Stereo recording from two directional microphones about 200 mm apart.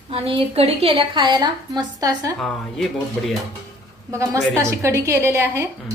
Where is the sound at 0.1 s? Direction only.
30° right (ahead or behind).